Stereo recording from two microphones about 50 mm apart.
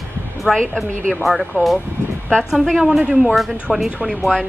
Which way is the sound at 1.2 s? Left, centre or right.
Centre.